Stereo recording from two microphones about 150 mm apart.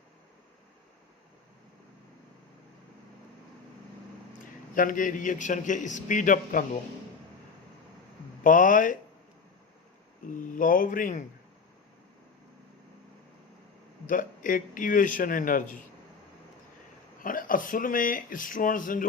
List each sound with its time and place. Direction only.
4.7 s a man's voice: 65° left (ahead or behind)
8.4 s a man's voice: 65° left (ahead or behind)
10.2 s a man's voice: 60° left (ahead or behind)
14.1 s a man's voice: 65° left (ahead or behind)
17.2 s a man's voice: 65° left (ahead or behind)